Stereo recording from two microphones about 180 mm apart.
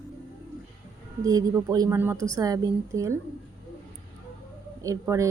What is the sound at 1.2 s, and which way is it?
Speech, 20° right (ahead or behind).